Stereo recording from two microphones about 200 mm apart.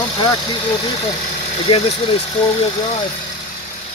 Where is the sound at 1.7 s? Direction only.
25° left (ahead or behind).